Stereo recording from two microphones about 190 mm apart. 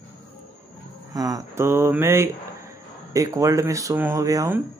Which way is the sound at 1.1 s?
20° right (ahead or behind).